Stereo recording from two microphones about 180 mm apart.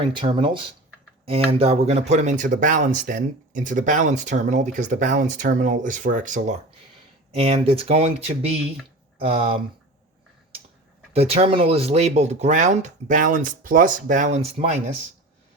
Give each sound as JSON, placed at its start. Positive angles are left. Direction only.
{"t": 0.0, "sound": "speech", "side_deg": -25}
{"t": 7.3, "sound": "speech", "side_deg": -35}
{"t": 11.1, "sound": "speech", "side_deg": -35}